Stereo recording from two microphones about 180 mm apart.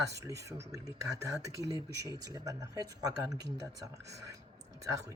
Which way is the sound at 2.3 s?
20° right (ahead or behind).